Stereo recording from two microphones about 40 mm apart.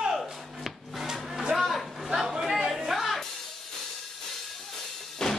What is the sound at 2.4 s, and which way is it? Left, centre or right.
Chatter, centre.